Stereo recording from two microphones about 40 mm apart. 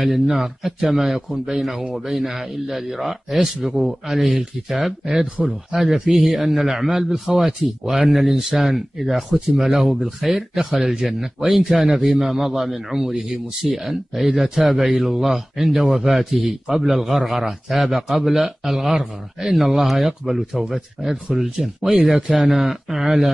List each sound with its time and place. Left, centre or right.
0.4 s a man's voice: centre
21.6 s a man's voice: centre